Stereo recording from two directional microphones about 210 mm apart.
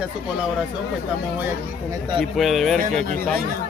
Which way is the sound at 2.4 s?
Centre (ahead or behind).